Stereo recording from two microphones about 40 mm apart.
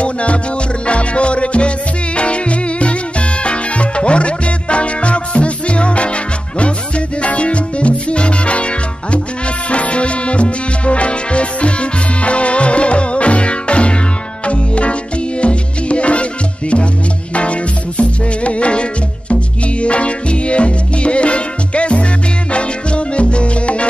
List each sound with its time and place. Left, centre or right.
0.0 s music: left
7.2 s salsa music: left
9.7 s music: left